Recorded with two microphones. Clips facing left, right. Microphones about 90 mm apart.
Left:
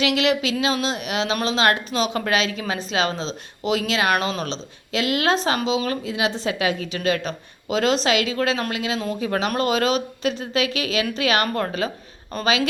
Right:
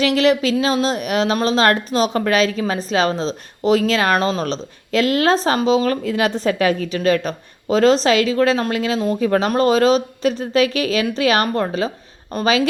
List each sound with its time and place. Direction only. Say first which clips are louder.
0.0 s speech: right 5 dB; 35° right (ahead or behind)